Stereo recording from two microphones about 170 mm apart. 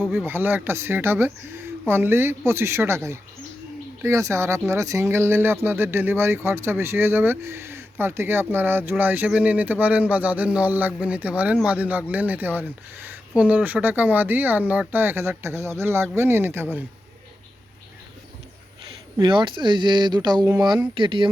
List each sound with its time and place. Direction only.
0.0 s speech: centre (ahead or behind)
0.3 s speech: 10° right (ahead or behind)
19.1 s speech: 25° right (ahead or behind)